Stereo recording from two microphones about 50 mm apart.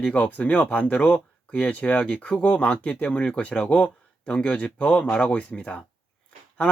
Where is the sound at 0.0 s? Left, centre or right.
Left.